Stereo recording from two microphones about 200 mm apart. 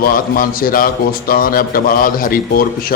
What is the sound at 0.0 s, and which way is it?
A man's voice, 45° left (ahead or behind).